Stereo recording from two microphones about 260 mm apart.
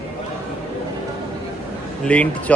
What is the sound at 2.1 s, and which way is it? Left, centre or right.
Speech, centre.